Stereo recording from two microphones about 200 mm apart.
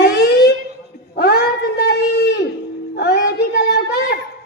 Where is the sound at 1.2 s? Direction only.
50° left (ahead or behind).